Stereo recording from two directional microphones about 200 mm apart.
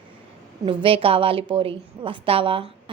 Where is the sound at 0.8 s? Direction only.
25° right (ahead or behind).